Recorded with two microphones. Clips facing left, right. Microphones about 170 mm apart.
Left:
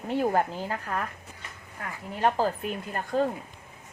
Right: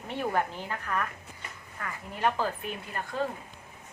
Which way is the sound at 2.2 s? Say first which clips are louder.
Left 4 dB; 40° left (ahead or behind).